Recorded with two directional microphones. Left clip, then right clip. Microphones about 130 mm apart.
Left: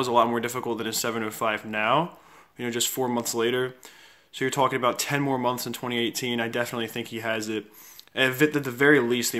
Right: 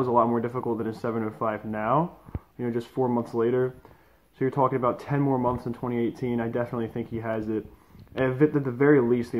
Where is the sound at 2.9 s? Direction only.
35° left (ahead or behind).